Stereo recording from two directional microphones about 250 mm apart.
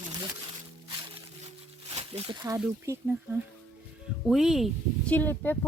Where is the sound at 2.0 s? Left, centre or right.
Right.